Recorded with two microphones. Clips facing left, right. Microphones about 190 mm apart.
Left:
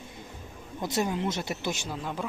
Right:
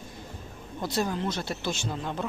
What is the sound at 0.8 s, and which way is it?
Speech, 20° left (ahead or behind).